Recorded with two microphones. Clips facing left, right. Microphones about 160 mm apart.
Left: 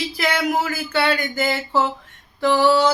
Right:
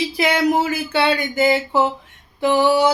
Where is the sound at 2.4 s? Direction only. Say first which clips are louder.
Right 1 dB; 15° right (ahead or behind).